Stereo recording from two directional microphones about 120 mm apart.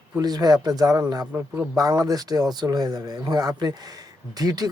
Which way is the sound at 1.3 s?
20° right (ahead or behind).